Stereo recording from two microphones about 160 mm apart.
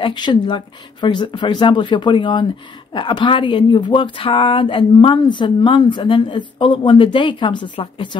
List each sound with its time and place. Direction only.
0.0 s speech: 30° left (ahead or behind)